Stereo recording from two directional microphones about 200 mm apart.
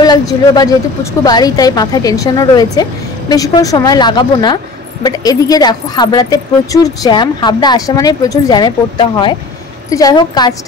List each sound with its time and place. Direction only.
0.0 s speech: 20° left (ahead or behind)